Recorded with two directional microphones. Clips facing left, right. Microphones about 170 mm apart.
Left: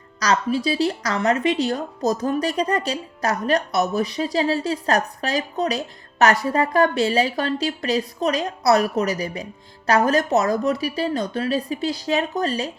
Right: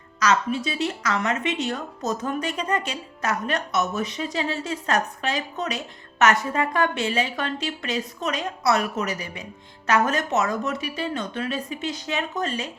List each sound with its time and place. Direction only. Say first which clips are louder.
0.2 s a woman's voice: left 2 dB; 35° left (ahead or behind)